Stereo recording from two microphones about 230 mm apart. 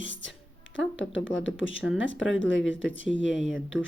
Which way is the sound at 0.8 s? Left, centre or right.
Left.